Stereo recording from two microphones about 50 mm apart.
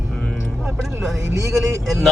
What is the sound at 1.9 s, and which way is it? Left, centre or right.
Speech, centre.